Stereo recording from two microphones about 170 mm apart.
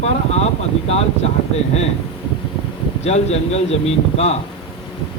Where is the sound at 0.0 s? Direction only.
40° left (ahead or behind).